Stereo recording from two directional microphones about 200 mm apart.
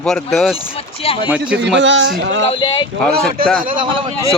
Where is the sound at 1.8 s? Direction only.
65° right (ahead or behind).